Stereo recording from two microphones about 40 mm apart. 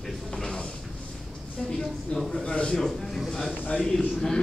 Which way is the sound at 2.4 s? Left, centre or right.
Left.